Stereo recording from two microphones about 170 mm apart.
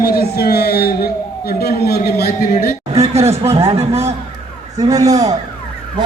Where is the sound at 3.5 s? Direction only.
35° right (ahead or behind).